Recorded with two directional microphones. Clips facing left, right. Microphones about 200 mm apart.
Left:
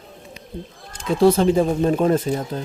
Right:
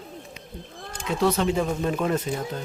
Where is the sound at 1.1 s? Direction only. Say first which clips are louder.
Left 7 dB; 30° left (ahead or behind).